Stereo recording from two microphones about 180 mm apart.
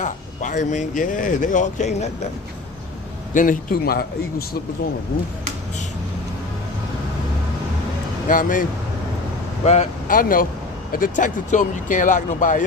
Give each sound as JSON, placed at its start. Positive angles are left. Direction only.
{"t": 0.0, "sound": "speech", "side_deg": 45}
{"t": 3.3, "sound": "speech", "side_deg": 50}
{"t": 8.3, "sound": "speech", "side_deg": 50}
{"t": 10.1, "sound": "speech", "side_deg": 50}